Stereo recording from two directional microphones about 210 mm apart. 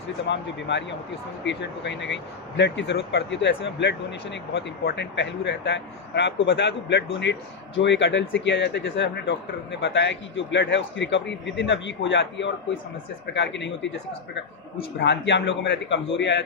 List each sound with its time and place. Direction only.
0.3 s speech: 55° left (ahead or behind)